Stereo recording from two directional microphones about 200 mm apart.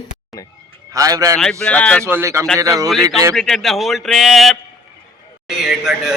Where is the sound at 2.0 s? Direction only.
15° right (ahead or behind).